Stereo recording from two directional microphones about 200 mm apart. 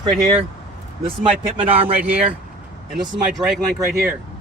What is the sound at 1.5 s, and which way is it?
Speech, 30° right (ahead or behind).